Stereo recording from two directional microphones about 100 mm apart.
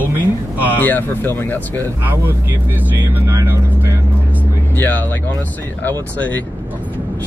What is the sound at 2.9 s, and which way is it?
Speech, 20° right (ahead or behind).